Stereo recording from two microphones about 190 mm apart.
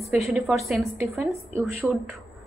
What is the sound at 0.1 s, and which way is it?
Speech, centre (ahead or behind).